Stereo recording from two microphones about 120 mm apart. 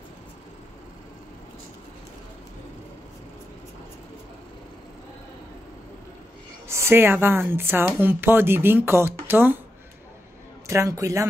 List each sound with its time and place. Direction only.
6.7 s speech: 20° right (ahead or behind)
10.7 s speech: 25° right (ahead or behind)